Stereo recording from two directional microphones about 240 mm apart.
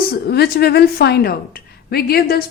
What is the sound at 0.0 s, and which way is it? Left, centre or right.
A woman's voice, left.